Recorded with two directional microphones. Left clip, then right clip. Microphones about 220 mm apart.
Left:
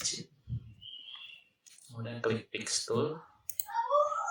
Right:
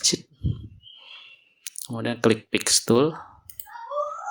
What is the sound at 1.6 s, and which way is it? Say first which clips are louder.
Speech: right 19 dB; 45° right (ahead or behind).